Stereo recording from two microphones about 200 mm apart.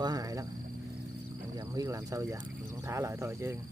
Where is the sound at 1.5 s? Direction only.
20° right (ahead or behind).